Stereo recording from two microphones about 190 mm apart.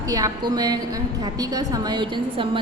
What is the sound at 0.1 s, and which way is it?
A woman's voice, 20° right (ahead or behind).